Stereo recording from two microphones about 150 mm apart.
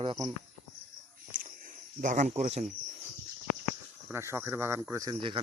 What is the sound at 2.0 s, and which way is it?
Speech, 55° right (ahead or behind).